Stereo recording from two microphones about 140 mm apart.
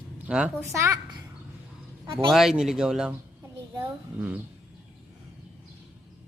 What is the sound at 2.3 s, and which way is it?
Speech, 5° right (ahead or behind).